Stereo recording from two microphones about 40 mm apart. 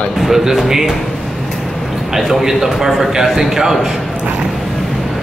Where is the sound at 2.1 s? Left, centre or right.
Centre.